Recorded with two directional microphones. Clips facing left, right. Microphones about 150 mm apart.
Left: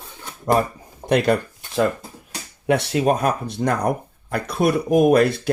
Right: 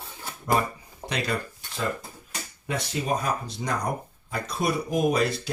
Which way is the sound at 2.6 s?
70° left (ahead or behind).